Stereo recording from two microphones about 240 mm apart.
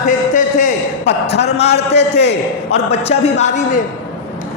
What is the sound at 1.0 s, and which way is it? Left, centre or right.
Speech, left.